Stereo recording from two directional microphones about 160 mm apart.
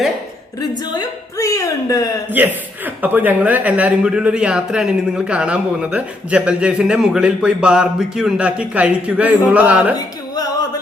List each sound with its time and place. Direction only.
0.9 s a woman's voice: 20° left (ahead or behind)
2.3 s a man's voice: 10° right (ahead or behind)